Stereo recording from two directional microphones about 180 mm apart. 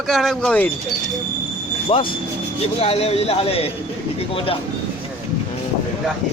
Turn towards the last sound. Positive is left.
turn(degrees=30)  # may be behind; listen again after turning